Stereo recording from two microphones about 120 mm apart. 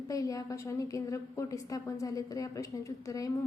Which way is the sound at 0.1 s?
30° left (ahead or behind).